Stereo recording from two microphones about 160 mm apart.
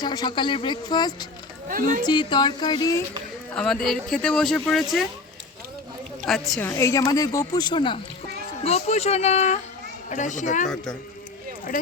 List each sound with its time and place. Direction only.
0.0 s a woman's voice: 25° left (ahead or behind)
1.6 s speech: 60° right (ahead or behind)
2.0 s a woman's voice: 30° left (ahead or behind)
3.5 s speech: 5° left (ahead or behind)
6.2 s speech: centre (ahead or behind)
6.6 s a woman's voice: 15° left (ahead or behind); by 10.7 s 50° left (ahead or behind)